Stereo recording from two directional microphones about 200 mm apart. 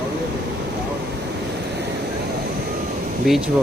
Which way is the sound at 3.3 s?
Centre (ahead or behind).